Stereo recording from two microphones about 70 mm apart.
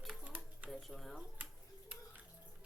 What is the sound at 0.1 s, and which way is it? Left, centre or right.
Shuffling cards, right.